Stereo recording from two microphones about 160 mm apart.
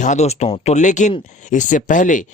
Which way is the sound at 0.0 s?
45° left (ahead or behind).